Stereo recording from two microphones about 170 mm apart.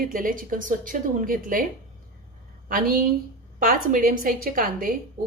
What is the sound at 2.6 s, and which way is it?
A woman's voice, 55° right (ahead or behind).